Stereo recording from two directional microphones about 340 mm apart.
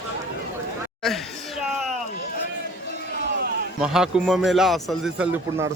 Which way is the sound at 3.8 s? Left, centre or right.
Centre.